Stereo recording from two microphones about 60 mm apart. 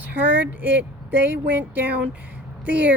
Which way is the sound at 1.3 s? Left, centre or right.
Right.